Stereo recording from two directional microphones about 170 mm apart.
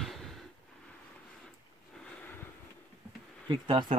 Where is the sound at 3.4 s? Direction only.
30° right (ahead or behind).